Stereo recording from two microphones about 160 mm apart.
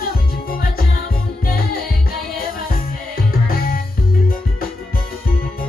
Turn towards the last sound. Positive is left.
turn(degrees=65)  # may be behind; listen again after turning